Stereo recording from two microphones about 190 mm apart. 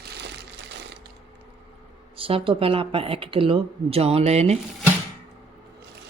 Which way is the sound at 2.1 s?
30° right (ahead or behind).